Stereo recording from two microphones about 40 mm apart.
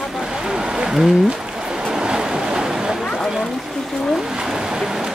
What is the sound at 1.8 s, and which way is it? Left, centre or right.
Waves, centre.